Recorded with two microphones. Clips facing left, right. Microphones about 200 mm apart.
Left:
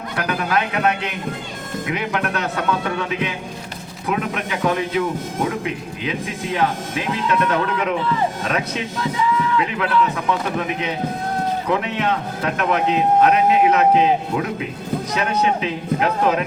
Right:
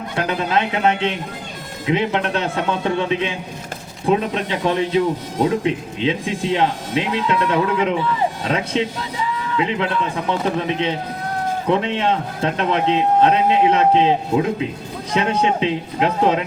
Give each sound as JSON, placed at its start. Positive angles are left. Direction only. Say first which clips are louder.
{"t": 0.2, "sound": "a man's voice", "louder": "right 2 dB", "side_deg": -25}